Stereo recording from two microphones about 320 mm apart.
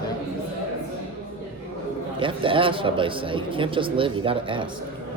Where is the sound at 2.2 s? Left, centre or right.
Centre.